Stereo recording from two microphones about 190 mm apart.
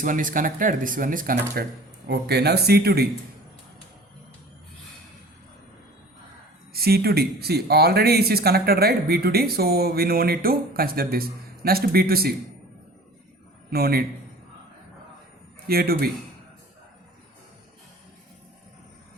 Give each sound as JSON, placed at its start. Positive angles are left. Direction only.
{"t": 0.0, "sound": "speech", "side_deg": -45}
{"t": 2.0, "sound": "speech", "side_deg": -60}
{"t": 6.7, "sound": "speech", "side_deg": -55}
{"t": 13.7, "sound": "a man's voice", "side_deg": -55}
{"t": 15.6, "sound": "speech", "side_deg": -55}